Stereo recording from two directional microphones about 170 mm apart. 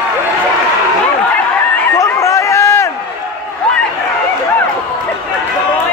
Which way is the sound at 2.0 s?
20° left (ahead or behind).